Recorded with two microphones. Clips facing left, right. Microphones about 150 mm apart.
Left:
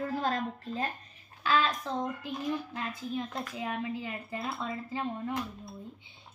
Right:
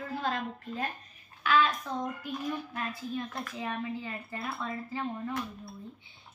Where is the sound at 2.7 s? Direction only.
15° left (ahead or behind).